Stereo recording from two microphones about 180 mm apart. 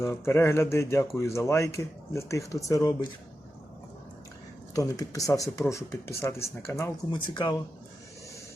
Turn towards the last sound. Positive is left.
turn(degrees=25)  # may be behind; listen again after turning